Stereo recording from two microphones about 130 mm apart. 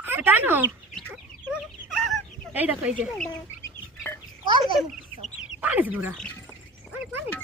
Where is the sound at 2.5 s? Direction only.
10° right (ahead or behind).